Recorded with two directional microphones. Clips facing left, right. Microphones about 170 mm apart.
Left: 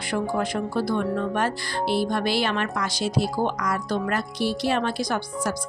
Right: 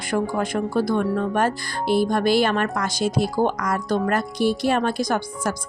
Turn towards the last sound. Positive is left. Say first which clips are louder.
# right 3 dB
turn(degrees=-45)  # may be behind; listen again after turning